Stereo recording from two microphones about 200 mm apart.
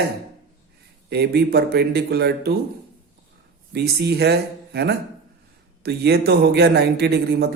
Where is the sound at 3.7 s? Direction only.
55° right (ahead or behind).